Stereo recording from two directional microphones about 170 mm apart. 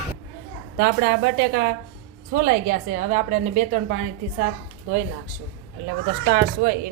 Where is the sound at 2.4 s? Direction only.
55° right (ahead or behind).